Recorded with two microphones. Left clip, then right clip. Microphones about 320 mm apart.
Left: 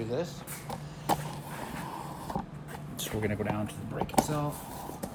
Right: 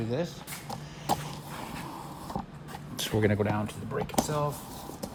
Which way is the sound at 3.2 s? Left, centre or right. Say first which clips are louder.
Right 5 dB; right.